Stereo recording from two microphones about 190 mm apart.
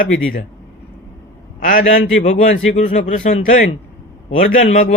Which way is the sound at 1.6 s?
45° left (ahead or behind).